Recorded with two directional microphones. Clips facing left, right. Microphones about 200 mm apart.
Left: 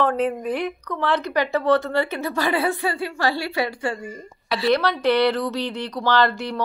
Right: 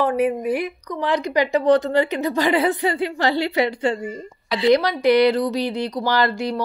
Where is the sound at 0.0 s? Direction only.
10° right (ahead or behind).